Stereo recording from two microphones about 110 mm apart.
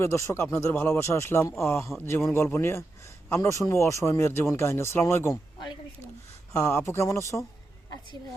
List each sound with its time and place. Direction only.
0.0 s speech: 25° left (ahead or behind)
6.5 s speech: 25° left (ahead or behind)